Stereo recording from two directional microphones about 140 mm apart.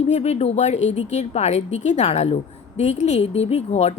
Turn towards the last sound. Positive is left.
turn(degrees=50)  # may be behind; listen again after turning